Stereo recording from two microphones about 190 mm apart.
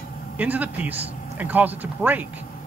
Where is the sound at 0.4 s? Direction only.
10° right (ahead or behind).